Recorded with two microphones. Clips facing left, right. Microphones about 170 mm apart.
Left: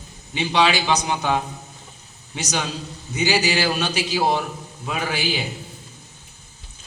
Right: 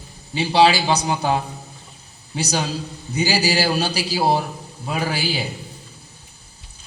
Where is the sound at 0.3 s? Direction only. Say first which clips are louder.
Right 4 dB; 35° right (ahead or behind).